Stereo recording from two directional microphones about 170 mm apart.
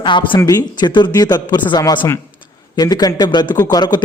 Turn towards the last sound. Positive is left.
turn(degrees=25)  # may be behind; listen again after turning